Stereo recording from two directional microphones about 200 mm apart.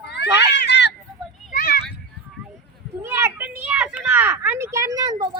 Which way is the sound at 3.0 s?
10° right (ahead or behind).